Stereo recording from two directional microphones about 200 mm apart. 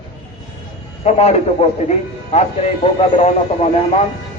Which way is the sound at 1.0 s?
30° left (ahead or behind).